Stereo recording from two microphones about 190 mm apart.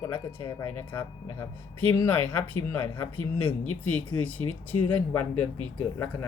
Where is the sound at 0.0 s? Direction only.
15° left (ahead or behind).